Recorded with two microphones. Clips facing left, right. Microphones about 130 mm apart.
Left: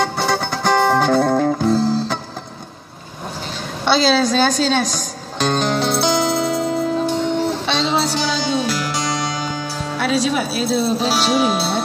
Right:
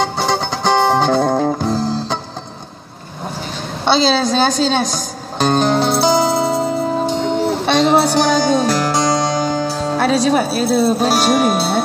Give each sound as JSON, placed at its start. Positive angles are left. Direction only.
{"t": 0.0, "sound": "music", "side_deg": -20}
{"t": 3.8, "sound": "a woman's voice", "side_deg": -30}
{"t": 4.9, "sound": "music", "side_deg": -40}
{"t": 7.6, "sound": "music", "side_deg": -55}
{"t": 9.7, "sound": "speech", "side_deg": -40}